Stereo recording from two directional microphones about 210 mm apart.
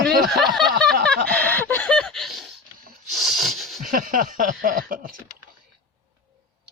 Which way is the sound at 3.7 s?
40° right (ahead or behind).